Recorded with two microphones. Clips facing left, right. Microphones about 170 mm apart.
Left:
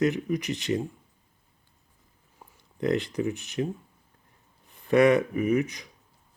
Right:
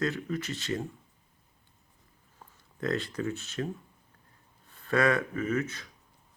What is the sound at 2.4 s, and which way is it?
Speech, 20° left (ahead or behind).